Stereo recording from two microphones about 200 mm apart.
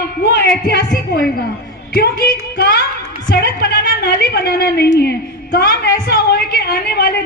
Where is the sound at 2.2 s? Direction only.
50° left (ahead or behind).